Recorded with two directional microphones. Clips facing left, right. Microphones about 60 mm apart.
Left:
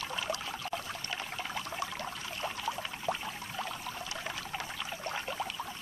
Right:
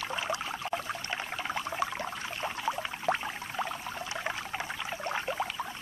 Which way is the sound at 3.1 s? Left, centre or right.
Right.